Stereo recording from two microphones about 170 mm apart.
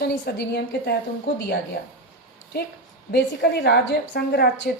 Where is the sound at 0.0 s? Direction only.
75° left (ahead or behind).